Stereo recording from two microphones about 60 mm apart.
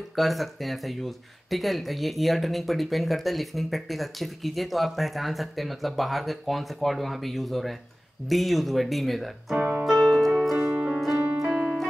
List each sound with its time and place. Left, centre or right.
0.1 s speech: centre
9.6 s music: right
9.8 s music: centre
10.6 s music: centre
11.4 s piano: centre